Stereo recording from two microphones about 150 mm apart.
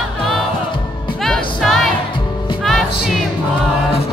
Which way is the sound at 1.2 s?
Centre (ahead or behind).